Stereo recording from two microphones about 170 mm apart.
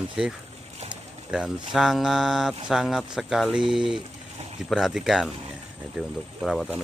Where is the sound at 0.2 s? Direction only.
5° right (ahead or behind).